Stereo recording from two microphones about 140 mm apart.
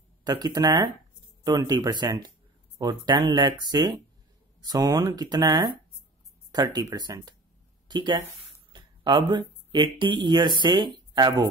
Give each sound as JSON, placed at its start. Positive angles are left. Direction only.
{"t": 0.2, "sound": "speech", "side_deg": -30}